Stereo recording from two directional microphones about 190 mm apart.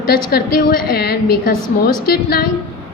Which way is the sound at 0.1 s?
55° left (ahead or behind).